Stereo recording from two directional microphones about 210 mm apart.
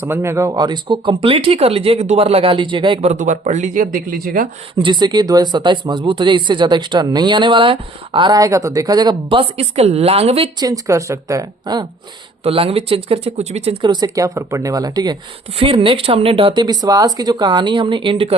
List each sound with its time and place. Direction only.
0.0 s speech: 10° right (ahead or behind); by 4.4 s 40° right (ahead or behind)
4.7 s speech: 25° right (ahead or behind)